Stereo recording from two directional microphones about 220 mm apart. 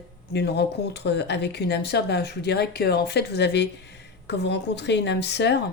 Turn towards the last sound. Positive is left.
turn(degrees=50)  # may be behind; listen again after turning